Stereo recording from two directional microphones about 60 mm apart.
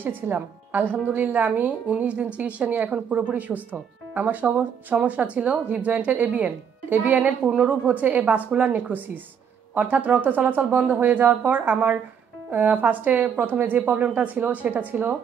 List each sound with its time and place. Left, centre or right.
0.0 s speech: right